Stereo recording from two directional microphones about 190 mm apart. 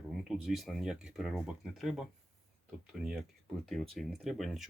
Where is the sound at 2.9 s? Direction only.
Centre (ahead or behind).